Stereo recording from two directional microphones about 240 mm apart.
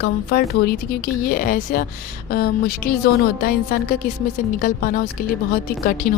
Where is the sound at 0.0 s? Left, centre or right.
Left.